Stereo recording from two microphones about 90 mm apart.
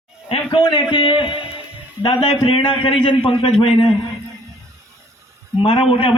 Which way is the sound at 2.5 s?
80° left.